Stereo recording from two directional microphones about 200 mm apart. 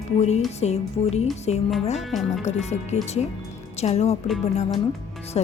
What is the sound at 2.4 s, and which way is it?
Speech, 35° left (ahead or behind).